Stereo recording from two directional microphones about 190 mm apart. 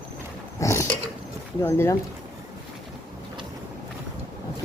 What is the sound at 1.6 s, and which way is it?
Speech, 15° left (ahead or behind).